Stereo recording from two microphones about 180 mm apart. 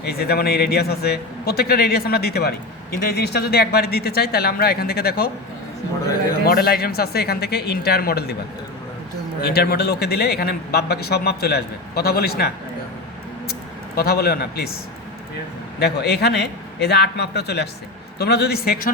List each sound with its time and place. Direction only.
0.0 s a man's voice: 60° left (ahead or behind)
6.4 s a man's voice: 60° left (ahead or behind)
9.4 s a man's voice: 60° left (ahead or behind)
13.5 s speech: 60° left (ahead or behind)
15.8 s a man's voice: 65° left (ahead or behind)